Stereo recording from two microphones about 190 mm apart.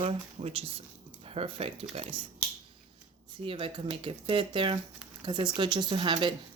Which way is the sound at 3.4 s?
30° right (ahead or behind).